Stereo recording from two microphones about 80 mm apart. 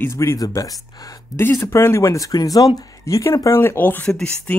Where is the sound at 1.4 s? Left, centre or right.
Left.